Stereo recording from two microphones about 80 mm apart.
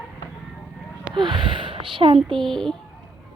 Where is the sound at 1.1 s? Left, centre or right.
Right.